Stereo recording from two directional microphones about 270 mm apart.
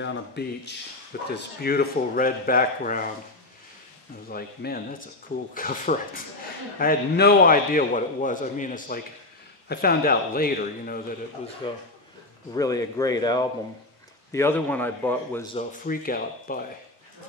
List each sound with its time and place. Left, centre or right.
0.0 s a man's voice: left
4.3 s a man's voice: left
11.6 s speech: centre
15.5 s a man's voice: left